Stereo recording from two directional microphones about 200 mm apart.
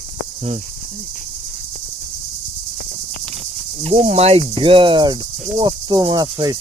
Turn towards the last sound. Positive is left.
turn(degrees=-20)  # may be behind; listen again after turning